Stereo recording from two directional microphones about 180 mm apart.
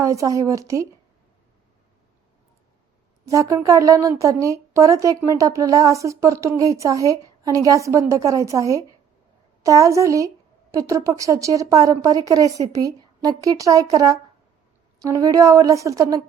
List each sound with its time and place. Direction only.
0.0 s speech: 20° right (ahead or behind)
3.2 s a woman's voice: 20° right (ahead or behind)